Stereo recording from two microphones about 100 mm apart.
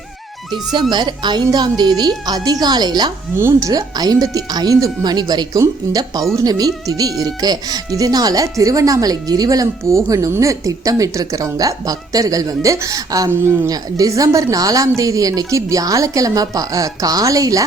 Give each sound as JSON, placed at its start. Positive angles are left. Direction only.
{"t": 0.7, "sound": "a woman's voice", "side_deg": -45}
{"t": 3.3, "sound": "speech", "side_deg": -25}
{"t": 3.7, "sound": "speech", "side_deg": -40}